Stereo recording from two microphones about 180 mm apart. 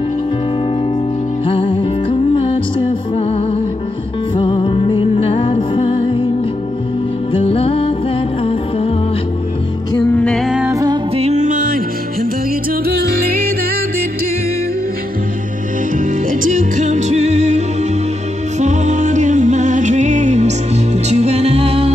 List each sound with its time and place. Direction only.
1.4 s music: 30° left (ahead or behind)
7.3 s music: 30° left (ahead or behind)
10.1 s music: 5° left (ahead or behind)
10.7 s music: 20° right (ahead or behind)
11.1 s music: 40° right (ahead or behind); by 13.5 s 55° right (ahead or behind)
16.0 s music: 45° right (ahead or behind)